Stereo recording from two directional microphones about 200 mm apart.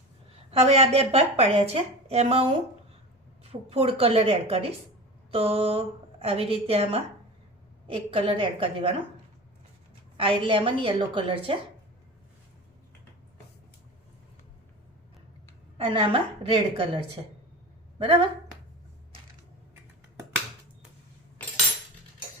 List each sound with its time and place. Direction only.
0.5 s a woman's voice: 30° right (ahead or behind)
10.2 s a woman's voice: 25° right (ahead or behind)
15.8 s a woman's voice: 25° right (ahead or behind)